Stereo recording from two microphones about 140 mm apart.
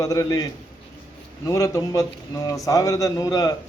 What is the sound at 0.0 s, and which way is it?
Speech, 25° left (ahead or behind).